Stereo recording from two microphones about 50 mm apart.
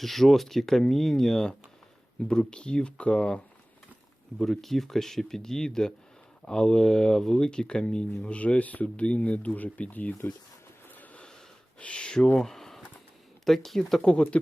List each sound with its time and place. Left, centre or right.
0.0 s speech: centre; by 3.4 s left
4.4 s speech: centre; by 10.2 s left
10.8 s a sound: left
11.8 s speech: left
12.4 s a sound: centre
13.4 s speech: centre
14.0 s speech: centre